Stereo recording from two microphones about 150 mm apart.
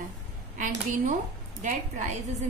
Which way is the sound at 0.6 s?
55° right (ahead or behind).